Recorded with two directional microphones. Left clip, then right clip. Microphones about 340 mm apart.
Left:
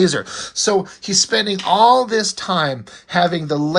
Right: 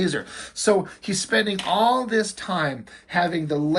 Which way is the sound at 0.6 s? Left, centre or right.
Centre.